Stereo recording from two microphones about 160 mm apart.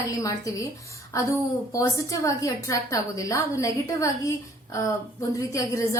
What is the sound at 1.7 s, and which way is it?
A woman's voice, 20° left (ahead or behind).